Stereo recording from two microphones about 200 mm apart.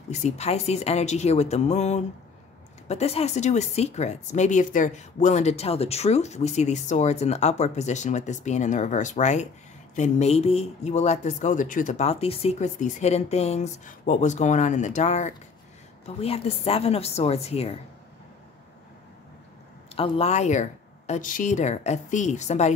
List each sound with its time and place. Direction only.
0.1 s speech: 35° left (ahead or behind)
20.0 s speech: 30° left (ahead or behind)